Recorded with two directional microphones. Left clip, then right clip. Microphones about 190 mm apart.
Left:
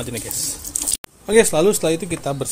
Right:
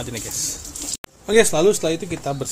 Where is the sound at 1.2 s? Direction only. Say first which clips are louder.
Left 1 dB; 10° left (ahead or behind).